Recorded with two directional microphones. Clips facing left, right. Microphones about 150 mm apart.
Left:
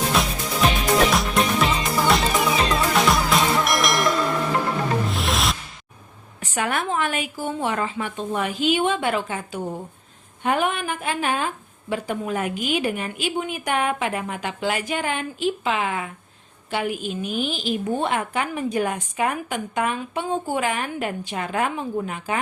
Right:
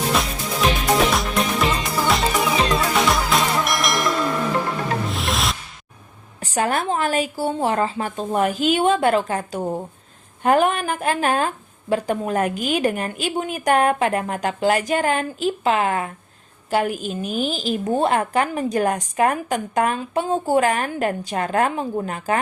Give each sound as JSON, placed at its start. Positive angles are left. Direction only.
{"t": 0.1, "sound": "music", "side_deg": 0}
{"t": 6.4, "sound": "a woman's voice", "side_deg": -35}